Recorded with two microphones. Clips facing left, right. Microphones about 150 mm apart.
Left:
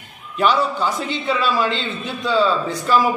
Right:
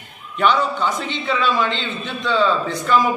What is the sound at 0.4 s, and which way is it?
A man's voice, 5° left (ahead or behind).